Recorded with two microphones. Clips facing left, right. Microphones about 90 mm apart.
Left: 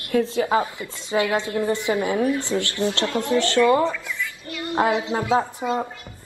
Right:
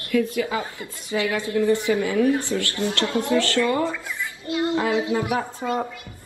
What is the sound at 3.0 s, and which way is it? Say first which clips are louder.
Speech: even; 20° right (ahead or behind).